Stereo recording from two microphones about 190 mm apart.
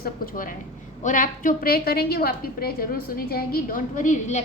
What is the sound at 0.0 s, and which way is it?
A woman's voice, 45° left (ahead or behind).